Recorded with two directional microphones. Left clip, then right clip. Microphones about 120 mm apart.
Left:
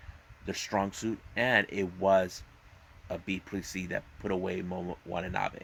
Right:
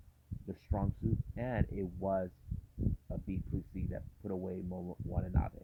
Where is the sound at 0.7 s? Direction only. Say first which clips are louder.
Left 10 dB; 15° left (ahead or behind).